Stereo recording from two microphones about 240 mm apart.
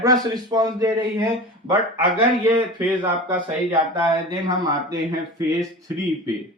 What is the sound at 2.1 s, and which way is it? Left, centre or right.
Speech, right.